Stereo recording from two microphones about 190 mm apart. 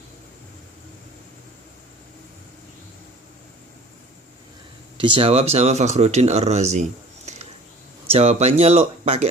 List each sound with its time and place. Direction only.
4.9 s speech: 30° right (ahead or behind)
8.1 s speech: 35° right (ahead or behind)